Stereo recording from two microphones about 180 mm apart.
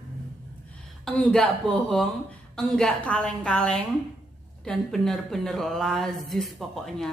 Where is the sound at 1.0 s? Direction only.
5° left (ahead or behind).